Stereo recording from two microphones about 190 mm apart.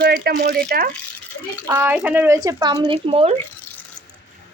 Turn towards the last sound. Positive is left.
turn(degrees=-30)  # may be behind; listen again after turning